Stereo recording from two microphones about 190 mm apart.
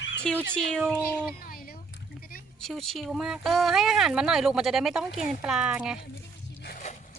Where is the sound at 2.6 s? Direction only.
Centre (ahead or behind).